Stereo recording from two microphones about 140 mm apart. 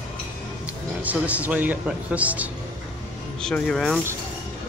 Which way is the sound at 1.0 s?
10° right (ahead or behind).